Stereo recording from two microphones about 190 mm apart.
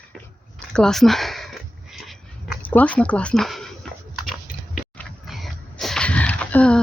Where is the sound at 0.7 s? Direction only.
5° left (ahead or behind).